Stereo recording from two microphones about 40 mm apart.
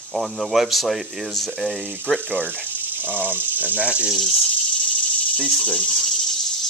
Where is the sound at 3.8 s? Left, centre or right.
Right.